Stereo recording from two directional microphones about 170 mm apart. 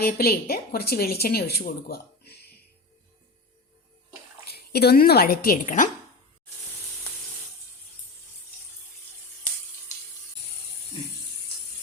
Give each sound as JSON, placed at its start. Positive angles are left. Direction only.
{"t": 0.0, "sound": "speech", "side_deg": 65}
{"t": 4.4, "sound": "a woman's voice", "side_deg": 70}
{"t": 5.6, "sound": "speech", "side_deg": 50}